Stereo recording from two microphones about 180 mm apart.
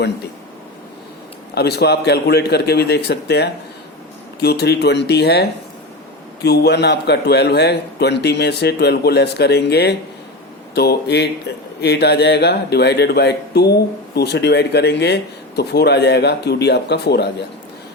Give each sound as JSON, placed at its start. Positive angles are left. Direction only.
{"t": 1.5, "sound": "a man's voice", "side_deg": 65}